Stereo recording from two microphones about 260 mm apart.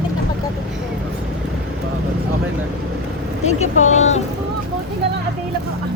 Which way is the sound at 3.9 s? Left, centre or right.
Left.